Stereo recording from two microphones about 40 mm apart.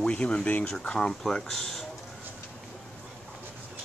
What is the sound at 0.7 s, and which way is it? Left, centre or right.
Speech, centre.